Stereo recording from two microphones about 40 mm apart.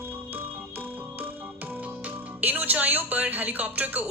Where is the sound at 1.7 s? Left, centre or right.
Right.